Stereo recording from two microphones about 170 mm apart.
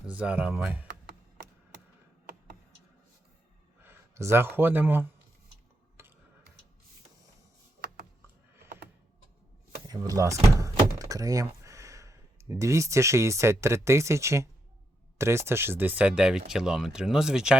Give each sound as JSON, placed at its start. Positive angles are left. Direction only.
{"t": 0.0, "sound": "speech", "side_deg": -5}
{"t": 3.8, "sound": "speech", "side_deg": -15}
{"t": 6.0, "sound": "tick-tock", "side_deg": -15}
{"t": 9.8, "sound": "speech", "side_deg": -20}